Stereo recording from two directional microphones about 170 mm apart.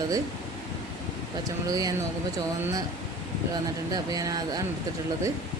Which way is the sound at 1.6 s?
20° right (ahead or behind).